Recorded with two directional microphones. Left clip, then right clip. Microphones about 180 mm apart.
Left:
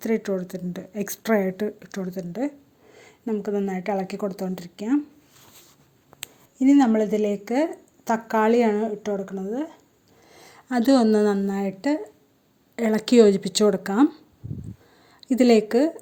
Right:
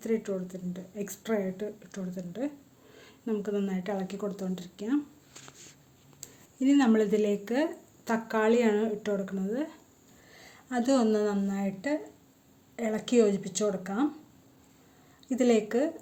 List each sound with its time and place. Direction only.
0.0 s speech: 50° left (ahead or behind)
2.9 s a sound: 25° left (ahead or behind)
3.7 s speech: 35° left (ahead or behind)
6.6 s speech: 30° left (ahead or behind)
8.7 s speech: 20° left (ahead or behind)
10.3 s a woman's voice: 45° left (ahead or behind)
15.3 s speech: 45° left (ahead or behind)